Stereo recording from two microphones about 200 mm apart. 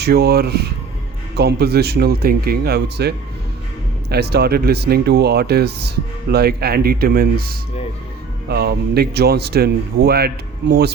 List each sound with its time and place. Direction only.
0.0 s speech: 55° right (ahead or behind)